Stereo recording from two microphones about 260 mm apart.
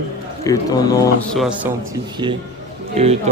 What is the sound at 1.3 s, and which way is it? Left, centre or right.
Speech, centre.